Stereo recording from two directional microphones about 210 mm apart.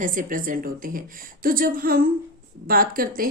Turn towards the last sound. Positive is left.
turn(degrees=-45)  # may be behind; listen again after turning